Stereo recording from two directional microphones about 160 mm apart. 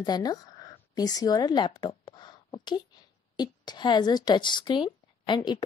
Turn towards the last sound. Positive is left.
turn(degrees=25)  # may be behind; listen again after turning